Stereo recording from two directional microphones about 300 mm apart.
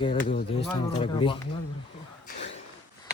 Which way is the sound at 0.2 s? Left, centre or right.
Left.